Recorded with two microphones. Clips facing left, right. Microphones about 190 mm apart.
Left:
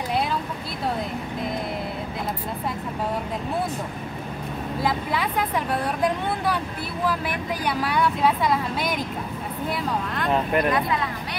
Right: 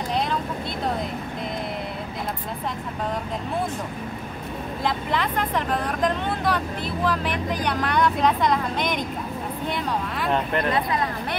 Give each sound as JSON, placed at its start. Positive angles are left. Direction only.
{"t": 4.8, "sound": "speech", "side_deg": 10}
{"t": 10.7, "sound": "speech", "side_deg": -40}